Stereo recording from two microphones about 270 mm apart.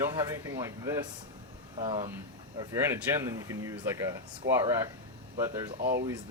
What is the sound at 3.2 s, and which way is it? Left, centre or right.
Speech, centre.